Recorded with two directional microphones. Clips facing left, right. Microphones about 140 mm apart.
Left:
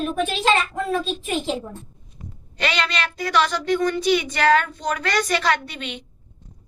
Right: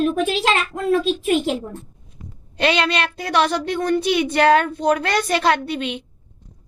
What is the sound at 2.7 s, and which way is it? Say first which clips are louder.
Speech: right 5 dB; 55° right (ahead or behind).